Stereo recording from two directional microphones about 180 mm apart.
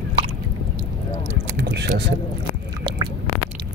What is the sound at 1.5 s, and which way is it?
Speech, 70° right (ahead or behind).